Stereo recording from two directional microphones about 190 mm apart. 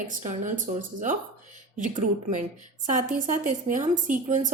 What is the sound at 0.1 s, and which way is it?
A woman's voice, 45° right (ahead or behind).